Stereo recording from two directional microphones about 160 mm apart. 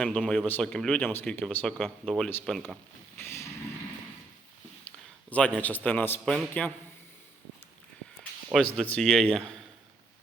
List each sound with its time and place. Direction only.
0.0 s speech: 5° left (ahead or behind)
3.2 s vehicle: 15° left (ahead or behind)
5.3 s a man's voice: 10° left (ahead or behind)
8.5 s speech: 5° left (ahead or behind)